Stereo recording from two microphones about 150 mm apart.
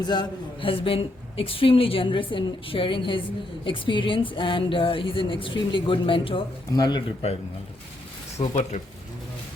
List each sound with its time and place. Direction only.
0.1 s a man's voice: 30° left (ahead or behind)
8.4 s speech: 50° left (ahead or behind)